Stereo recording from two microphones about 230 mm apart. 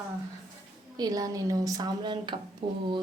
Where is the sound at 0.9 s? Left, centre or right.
Centre.